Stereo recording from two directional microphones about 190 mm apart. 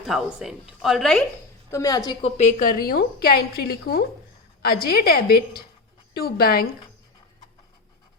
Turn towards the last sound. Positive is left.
turn(degrees=50)  # may be behind; listen again after turning